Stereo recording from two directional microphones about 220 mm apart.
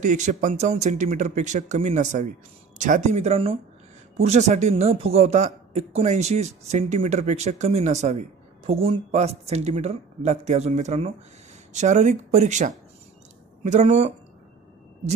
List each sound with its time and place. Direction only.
0.0 s a man's voice: 35° right (ahead or behind)